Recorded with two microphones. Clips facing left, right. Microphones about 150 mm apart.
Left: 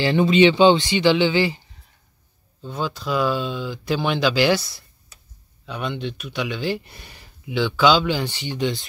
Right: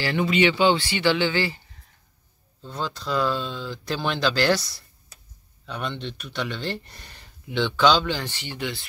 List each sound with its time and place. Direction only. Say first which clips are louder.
0.0 s speech: left 6 dB; 25° left (ahead or behind)
2.6 s speech: left 4 dB; 5° left (ahead or behind)
5.7 s speech: left 3 dB; 5° left (ahead or behind); by 8.8 s 20° left (ahead or behind)